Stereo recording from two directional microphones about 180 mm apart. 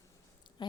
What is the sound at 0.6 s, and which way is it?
Dog, 25° left (ahead or behind).